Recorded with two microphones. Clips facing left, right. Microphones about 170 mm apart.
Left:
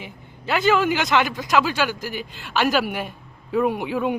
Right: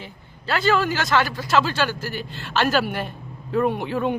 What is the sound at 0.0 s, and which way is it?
A man's voice, 15° left (ahead or behind).